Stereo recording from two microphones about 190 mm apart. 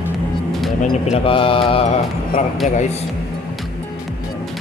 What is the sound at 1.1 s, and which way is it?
Speech, 30° left (ahead or behind).